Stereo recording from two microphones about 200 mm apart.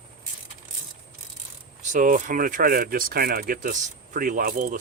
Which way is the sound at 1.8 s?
40° right (ahead or behind).